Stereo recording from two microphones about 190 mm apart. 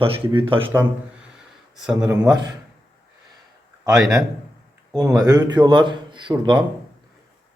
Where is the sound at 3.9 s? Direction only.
Centre (ahead or behind).